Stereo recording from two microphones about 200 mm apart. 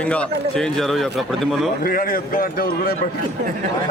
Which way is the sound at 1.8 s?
45° left (ahead or behind).